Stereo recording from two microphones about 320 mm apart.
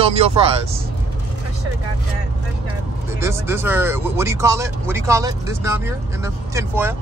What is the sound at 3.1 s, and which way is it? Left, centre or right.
Speech, centre.